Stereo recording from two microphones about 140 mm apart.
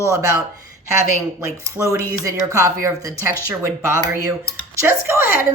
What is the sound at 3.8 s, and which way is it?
Speech, 25° right (ahead or behind).